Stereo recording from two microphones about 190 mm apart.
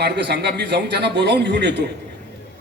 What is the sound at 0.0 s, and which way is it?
A man's voice, 60° right (ahead or behind).